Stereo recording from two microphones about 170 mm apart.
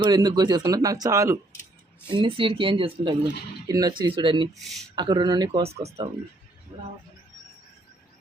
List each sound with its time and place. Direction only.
0.0 s speech: 25° right (ahead or behind)
2.0 s speech: 30° right (ahead or behind)
5.6 s speech: 35° right (ahead or behind)